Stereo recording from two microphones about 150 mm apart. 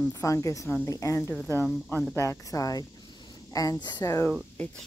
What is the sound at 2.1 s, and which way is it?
A woman's voice, 20° left (ahead or behind).